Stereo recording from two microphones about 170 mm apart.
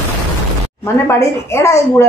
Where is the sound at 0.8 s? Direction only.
15° left (ahead or behind).